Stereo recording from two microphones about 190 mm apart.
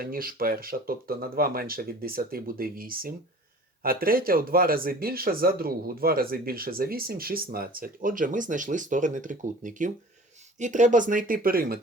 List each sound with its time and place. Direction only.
0.0 s speech: 50° right (ahead or behind)